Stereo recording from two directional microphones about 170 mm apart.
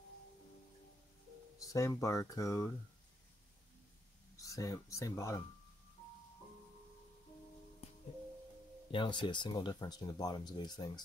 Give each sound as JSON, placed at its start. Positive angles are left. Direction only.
{"t": 1.6, "sound": "speech", "side_deg": 20}
{"t": 4.4, "sound": "speech", "side_deg": 20}
{"t": 8.9, "sound": "speech", "side_deg": 30}